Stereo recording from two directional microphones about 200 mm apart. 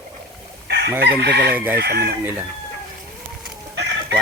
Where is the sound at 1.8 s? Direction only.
55° right (ahead or behind).